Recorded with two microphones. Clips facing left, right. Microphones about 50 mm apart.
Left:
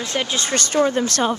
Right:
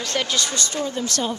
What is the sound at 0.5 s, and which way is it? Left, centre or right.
Speech, left.